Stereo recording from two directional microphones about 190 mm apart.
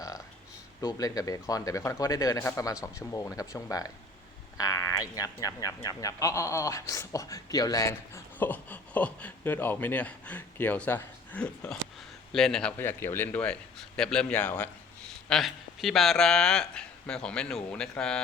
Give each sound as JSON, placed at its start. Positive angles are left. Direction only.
{"t": 0.8, "sound": "speech", "side_deg": 20}